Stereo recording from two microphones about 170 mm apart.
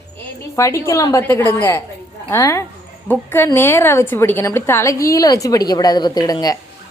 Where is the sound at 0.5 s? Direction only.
15° left (ahead or behind).